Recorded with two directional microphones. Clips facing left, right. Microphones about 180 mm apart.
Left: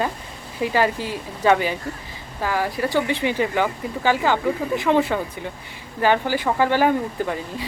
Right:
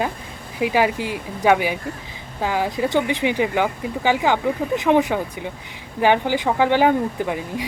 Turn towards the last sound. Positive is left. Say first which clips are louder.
# right 2 dB
turn(degrees=-15)  # may be behind; listen again after turning